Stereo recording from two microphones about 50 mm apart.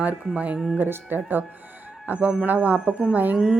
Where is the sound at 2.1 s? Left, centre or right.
Right.